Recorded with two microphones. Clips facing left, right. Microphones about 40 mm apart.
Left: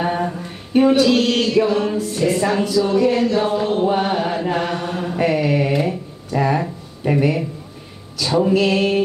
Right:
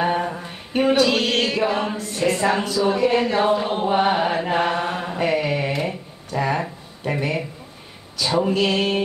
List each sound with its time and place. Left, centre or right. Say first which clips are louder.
0.0 s a capella: left 1 dB; centre
0.7 s mantra: left 4 dB; centre
2.0 s mantra: left 3 dB; centre
2.9 s speech: even; centre
3.5 s mantra: left 2 dB; centre
5.1 s mantra: left 4 dB; centre
5.7 s a sound: left 5 dB; centre
8.2 s mantra: left 3 dB; centre